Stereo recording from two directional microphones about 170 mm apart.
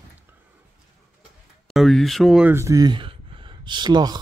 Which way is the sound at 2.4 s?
15° right (ahead or behind).